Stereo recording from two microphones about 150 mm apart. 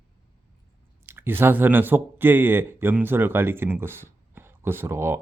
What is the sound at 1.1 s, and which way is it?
Speech, 15° right (ahead or behind).